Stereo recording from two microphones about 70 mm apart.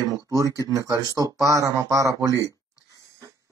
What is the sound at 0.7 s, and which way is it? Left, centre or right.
Speech, right.